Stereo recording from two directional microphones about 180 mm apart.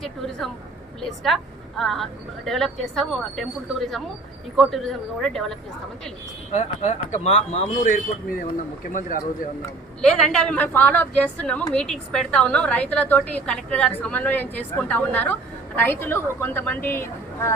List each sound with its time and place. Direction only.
0.0 s speech: centre (ahead or behind)
6.5 s a man's voice: 40° left (ahead or behind)
10.0 s a woman's voice: 5° left (ahead or behind)